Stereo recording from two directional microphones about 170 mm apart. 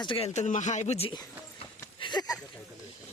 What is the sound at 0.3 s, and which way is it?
Speech, 45° left (ahead or behind).